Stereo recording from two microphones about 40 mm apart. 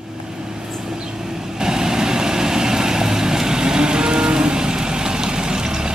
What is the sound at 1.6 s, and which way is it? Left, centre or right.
Vehicle, centre.